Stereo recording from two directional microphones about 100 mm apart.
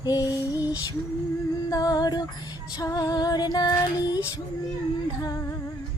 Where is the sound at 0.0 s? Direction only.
40° left (ahead or behind).